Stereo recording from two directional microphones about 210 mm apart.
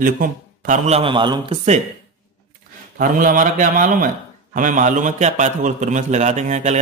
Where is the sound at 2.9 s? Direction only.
40° right (ahead or behind).